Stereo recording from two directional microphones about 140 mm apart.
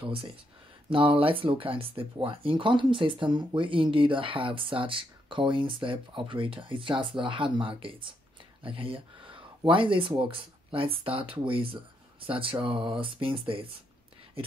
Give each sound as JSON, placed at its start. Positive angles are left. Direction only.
{"t": 0.0, "sound": "speech", "side_deg": -40}